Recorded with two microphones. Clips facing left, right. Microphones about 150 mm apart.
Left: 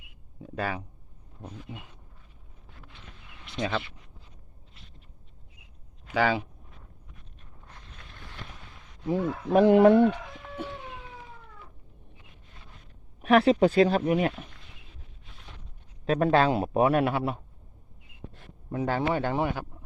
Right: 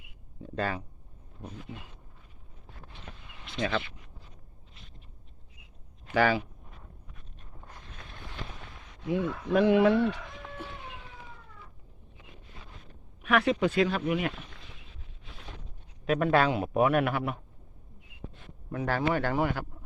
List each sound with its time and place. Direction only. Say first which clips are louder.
0.4 s speech: even; 10° left (ahead or behind)
6.1 s speech: even; 15° left (ahead or behind)
9.0 s speech: left 2 dB; 40° left (ahead or behind)
13.2 s a man's voice: left 6 dB; 30° left (ahead or behind)
16.0 s a man's voice: left 2 dB; 35° left (ahead or behind)
18.7 s a man's voice: left 1 dB; 20° left (ahead or behind)